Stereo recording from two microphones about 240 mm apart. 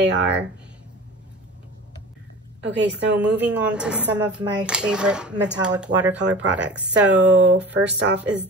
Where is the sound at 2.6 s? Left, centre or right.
Right.